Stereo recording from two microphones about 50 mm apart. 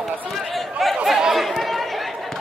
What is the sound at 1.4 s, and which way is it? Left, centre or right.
Chatter, centre.